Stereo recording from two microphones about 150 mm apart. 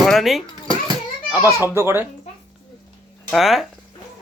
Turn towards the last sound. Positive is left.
turn(degrees=0)  # may be behind; listen again after turning